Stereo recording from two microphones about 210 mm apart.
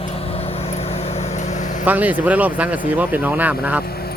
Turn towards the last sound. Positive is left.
turn(degrees=-5)  # may be behind; listen again after turning